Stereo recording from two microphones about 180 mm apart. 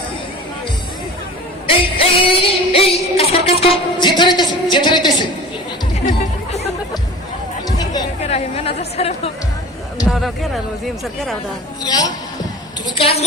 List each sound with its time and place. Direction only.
1.6 s music: 30° left (ahead or behind)
3.3 s a sound: 35° left (ahead or behind)
8.2 s a woman's voice: 35° left (ahead or behind)
10.1 s speech: centre (ahead or behind)
11.8 s a man's voice: 20° left (ahead or behind)
13.0 s a woman's voice: 35° left (ahead or behind)